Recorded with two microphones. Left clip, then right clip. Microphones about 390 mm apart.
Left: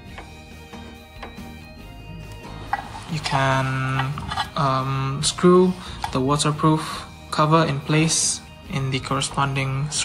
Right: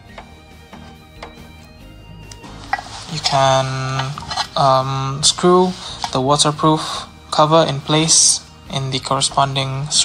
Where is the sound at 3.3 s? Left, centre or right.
Centre.